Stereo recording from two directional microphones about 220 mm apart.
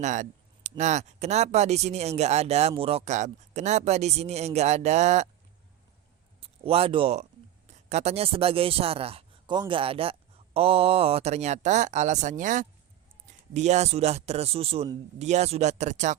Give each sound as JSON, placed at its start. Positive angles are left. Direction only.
{"t": 0.0, "sound": "speech", "side_deg": -35}
{"t": 6.4, "sound": "speech", "side_deg": -25}